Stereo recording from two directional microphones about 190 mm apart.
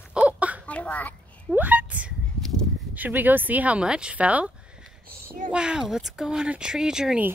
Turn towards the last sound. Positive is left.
turn(degrees=-5)  # may be behind; listen again after turning